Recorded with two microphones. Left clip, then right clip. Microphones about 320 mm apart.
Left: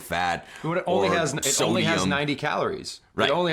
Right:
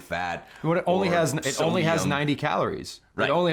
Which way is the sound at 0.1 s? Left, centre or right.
Centre.